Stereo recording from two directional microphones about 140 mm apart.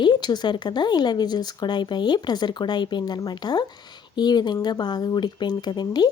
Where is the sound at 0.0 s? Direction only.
30° left (ahead or behind).